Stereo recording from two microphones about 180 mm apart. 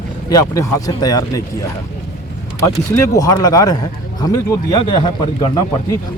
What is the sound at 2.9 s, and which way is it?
Speech, 15° left (ahead or behind).